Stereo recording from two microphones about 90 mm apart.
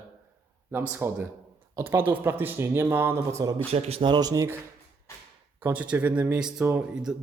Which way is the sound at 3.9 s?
80° right.